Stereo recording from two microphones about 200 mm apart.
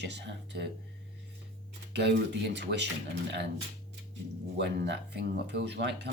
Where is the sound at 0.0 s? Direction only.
60° right (ahead or behind).